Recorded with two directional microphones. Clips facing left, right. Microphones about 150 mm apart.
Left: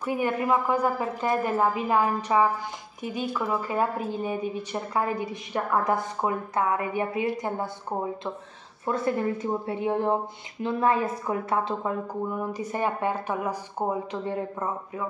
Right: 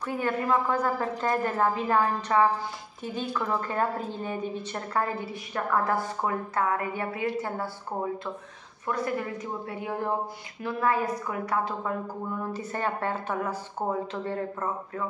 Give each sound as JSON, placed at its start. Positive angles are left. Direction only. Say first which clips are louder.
{"t": 0.0, "sound": "a woman's voice", "louder": "left 2 dB", "side_deg": 15}
{"t": 8.8, "sound": "a woman's voice", "louder": "left 4 dB", "side_deg": 30}